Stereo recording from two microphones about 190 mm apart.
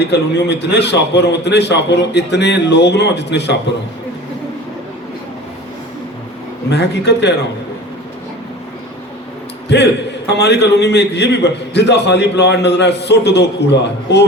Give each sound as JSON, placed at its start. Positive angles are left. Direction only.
{"t": 0.0, "sound": "a man's voice", "side_deg": 65}
{"t": 6.7, "sound": "a man's voice", "side_deg": 65}
{"t": 9.6, "sound": "a man's voice", "side_deg": 65}